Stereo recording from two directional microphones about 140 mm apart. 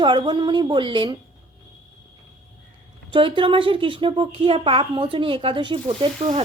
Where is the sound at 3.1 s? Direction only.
35° right (ahead or behind).